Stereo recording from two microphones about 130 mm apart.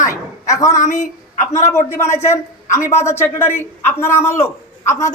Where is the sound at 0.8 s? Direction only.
75° left (ahead or behind).